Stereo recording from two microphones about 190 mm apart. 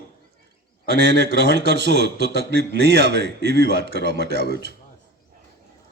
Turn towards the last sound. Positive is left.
turn(degrees=-60)  # may be behind; listen again after turning